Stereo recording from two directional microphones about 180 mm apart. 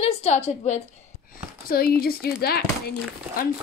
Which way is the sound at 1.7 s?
55° left (ahead or behind).